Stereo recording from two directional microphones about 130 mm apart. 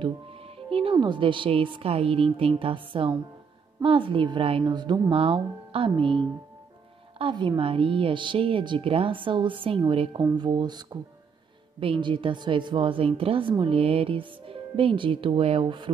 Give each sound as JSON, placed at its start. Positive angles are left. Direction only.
{"t": 0.0, "sound": "a woman's voice", "side_deg": -45}
{"t": 5.1, "sound": "a woman's voice", "side_deg": -45}